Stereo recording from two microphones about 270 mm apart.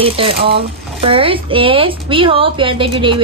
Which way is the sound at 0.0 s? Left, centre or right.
Right.